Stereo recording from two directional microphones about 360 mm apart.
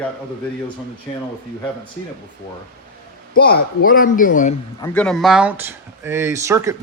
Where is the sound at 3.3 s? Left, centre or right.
Left.